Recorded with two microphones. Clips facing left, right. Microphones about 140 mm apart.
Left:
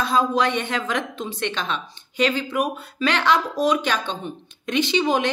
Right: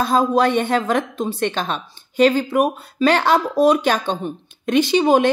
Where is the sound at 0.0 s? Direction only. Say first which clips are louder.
Right 4 dB; 40° right (ahead or behind).